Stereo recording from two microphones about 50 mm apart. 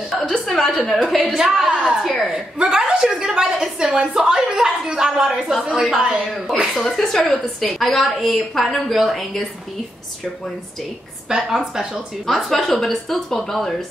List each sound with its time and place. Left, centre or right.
0.5 s a woman's voice: centre
1.3 s speech: centre
2.0 s a woman's voice: centre
2.3 s speech: centre
5.6 s a woman's voice: centre
5.9 s speech: centre
6.8 s a woman's voice: centre
11.2 s speech: centre
12.4 s a woman's voice: centre